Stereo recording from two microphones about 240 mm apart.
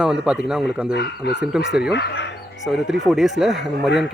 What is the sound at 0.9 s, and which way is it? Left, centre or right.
Speech, left.